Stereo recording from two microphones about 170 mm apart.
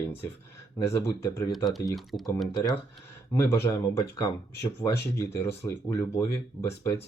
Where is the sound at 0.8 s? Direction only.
15° left (ahead or behind).